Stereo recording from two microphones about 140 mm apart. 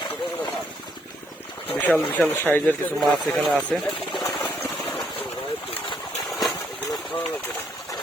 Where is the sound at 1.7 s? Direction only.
10° left (ahead or behind).